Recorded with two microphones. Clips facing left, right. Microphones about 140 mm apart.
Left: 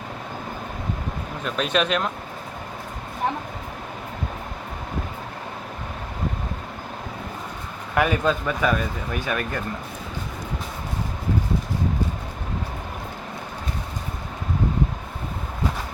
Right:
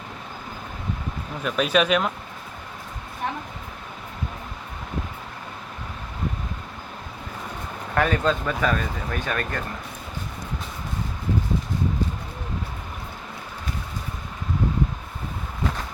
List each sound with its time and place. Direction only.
1.5 s speech: 5° right (ahead or behind)
7.9 s speech: 10° left (ahead or behind)